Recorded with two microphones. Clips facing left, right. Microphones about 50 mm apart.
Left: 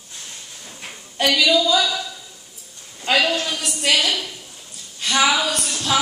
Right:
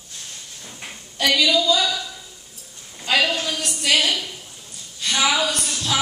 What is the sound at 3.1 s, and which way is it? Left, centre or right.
Speech, left.